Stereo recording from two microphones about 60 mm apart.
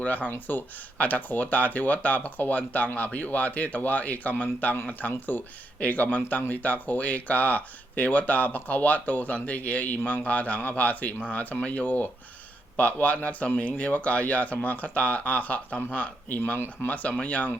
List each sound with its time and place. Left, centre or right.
0.0 s speech: left